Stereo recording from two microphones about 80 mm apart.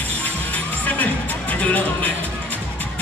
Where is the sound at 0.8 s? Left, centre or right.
Centre.